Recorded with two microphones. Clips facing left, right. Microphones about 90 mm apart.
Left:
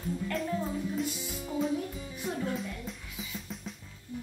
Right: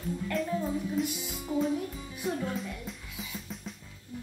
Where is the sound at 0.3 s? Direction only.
Centre (ahead or behind).